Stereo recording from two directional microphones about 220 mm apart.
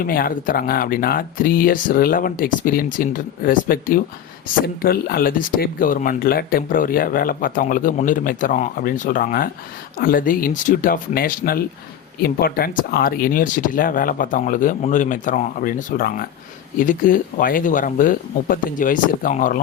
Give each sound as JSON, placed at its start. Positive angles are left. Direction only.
{"t": 0.0, "sound": "speech", "side_deg": 40}